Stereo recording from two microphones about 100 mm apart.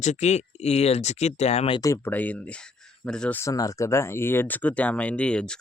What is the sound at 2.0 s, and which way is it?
Speech, 15° left (ahead or behind).